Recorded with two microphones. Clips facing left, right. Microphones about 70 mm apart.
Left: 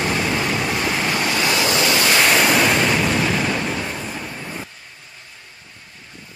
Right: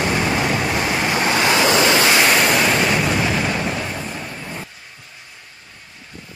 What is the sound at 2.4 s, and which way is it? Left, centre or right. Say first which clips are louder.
Waves: even; centre.